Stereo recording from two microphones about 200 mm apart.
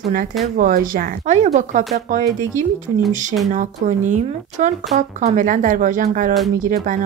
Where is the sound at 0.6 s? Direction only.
45° right (ahead or behind).